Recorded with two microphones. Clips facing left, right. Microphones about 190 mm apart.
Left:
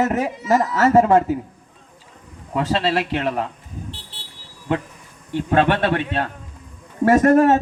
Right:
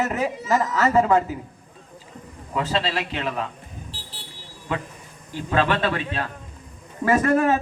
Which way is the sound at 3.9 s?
25° left (ahead or behind).